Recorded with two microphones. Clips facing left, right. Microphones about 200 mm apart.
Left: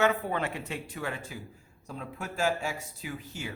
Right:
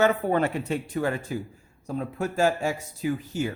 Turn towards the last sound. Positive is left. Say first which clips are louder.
# right 11 dB
turn(degrees=-45)  # may be behind; listen again after turning